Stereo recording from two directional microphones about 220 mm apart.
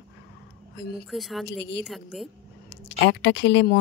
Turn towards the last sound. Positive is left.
turn(degrees=50)  # may be behind; listen again after turning